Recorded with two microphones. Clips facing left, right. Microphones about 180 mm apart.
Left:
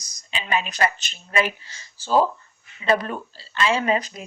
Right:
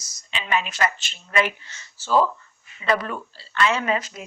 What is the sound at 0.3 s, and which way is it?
A woman's voice, 35° left (ahead or behind).